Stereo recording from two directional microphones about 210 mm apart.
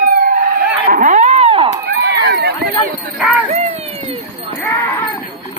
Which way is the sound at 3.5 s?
30° right (ahead or behind).